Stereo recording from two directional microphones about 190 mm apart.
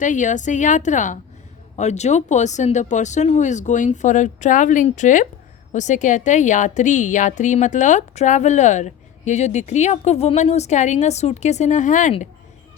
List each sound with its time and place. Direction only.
0.0 s a woman's voice: 40° left (ahead or behind)